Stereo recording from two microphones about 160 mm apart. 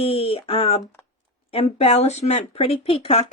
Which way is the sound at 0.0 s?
35° left (ahead or behind).